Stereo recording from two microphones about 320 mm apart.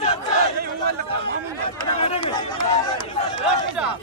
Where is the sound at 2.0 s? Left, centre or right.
Centre.